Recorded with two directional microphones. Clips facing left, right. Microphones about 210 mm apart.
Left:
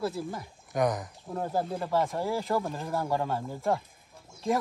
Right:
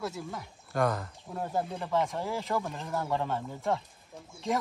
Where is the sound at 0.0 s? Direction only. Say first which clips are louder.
Left 5 dB; 30° left (ahead or behind).